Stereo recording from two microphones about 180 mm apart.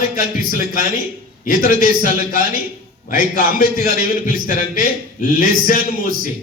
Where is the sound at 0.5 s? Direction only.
50° left (ahead or behind).